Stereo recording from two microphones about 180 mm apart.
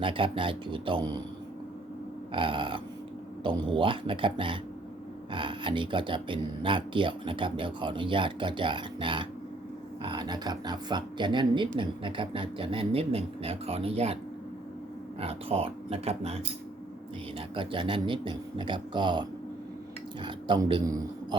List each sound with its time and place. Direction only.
0.0 s speech: 30° right (ahead or behind)
2.3 s speech: 30° right (ahead or behind)
15.2 s speech: 35° right (ahead or behind)
17.5 s speech: 30° right (ahead or behind)
20.2 s speech: 25° right (ahead or behind)